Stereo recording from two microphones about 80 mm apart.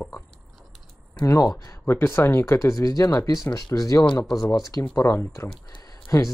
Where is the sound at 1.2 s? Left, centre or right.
Left.